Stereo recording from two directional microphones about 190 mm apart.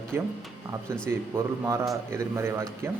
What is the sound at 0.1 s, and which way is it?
Speech, 10° right (ahead or behind).